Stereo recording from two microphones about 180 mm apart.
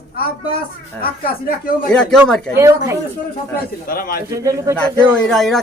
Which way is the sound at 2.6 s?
15° right (ahead or behind).